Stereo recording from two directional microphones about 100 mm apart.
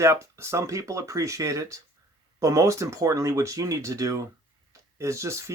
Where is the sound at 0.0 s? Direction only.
30° right (ahead or behind).